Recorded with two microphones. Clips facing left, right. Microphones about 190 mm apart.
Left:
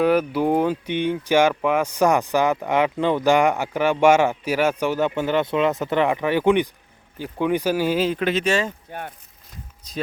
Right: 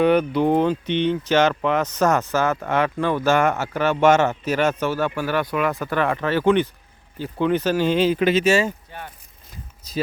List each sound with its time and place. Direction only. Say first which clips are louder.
0.0 s speech: right 1 dB; 5° left (ahead or behind)
8.9 s speech: left 4 dB; 55° left (ahead or behind)
9.5 s zipper: right 3 dB; 5° right (ahead or behind)